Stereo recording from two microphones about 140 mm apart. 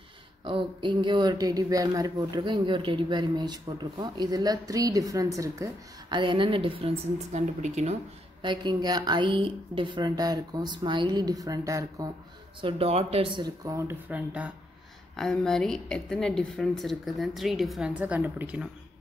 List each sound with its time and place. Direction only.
0.4 s speech: 35° right (ahead or behind)
7.3 s speech: 55° right (ahead or behind)
8.4 s speech: 35° right (ahead or behind)
12.6 s speech: 45° right (ahead or behind)
13.4 s speech: 20° right (ahead or behind)
15.1 s a woman's voice: 5° left (ahead or behind)